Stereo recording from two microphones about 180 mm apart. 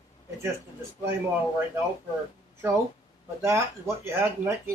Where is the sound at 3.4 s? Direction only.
15° right (ahead or behind).